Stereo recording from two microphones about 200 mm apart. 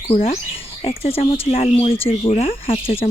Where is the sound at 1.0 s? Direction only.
30° left (ahead or behind).